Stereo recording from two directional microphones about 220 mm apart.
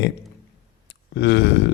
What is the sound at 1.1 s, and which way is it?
Speech, 50° left (ahead or behind).